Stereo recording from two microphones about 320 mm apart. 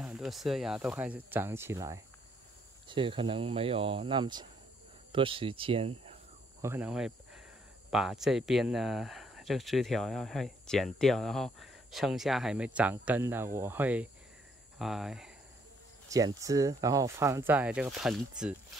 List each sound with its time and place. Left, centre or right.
0.0 s speech: centre
6.6 s speech: centre